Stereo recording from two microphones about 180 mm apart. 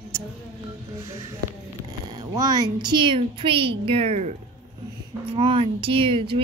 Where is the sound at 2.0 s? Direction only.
25° right (ahead or behind).